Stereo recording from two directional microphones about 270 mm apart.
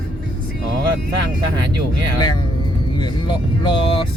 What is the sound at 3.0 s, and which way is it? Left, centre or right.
Speech, centre.